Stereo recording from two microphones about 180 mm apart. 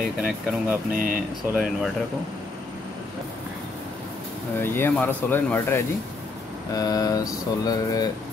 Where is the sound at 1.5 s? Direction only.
5° right (ahead or behind).